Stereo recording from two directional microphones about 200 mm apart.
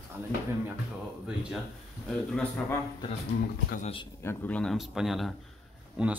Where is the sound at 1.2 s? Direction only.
5° right (ahead or behind).